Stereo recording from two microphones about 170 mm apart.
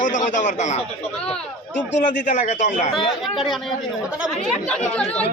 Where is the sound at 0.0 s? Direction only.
45° left (ahead or behind).